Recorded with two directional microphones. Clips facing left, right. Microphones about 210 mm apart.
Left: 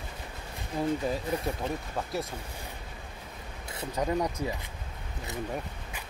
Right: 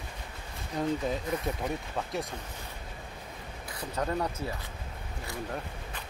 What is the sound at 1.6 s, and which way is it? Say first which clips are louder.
Speech: even; 25° left (ahead or behind).